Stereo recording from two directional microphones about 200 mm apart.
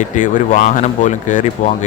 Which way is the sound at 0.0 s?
40° left (ahead or behind).